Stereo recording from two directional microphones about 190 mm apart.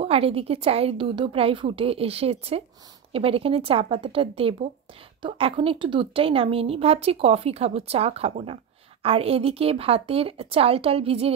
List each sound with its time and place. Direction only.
0.0 s a woman's voice: 30° right (ahead or behind)